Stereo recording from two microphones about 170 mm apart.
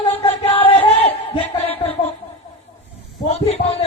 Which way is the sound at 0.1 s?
35° left (ahead or behind).